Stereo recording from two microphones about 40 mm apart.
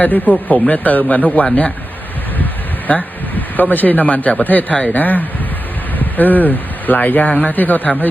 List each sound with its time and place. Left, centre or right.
0.0 s speech: left
2.4 s a sound: left
4.4 s speech: left